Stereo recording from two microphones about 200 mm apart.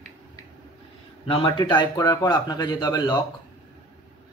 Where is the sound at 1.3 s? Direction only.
25° left (ahead or behind).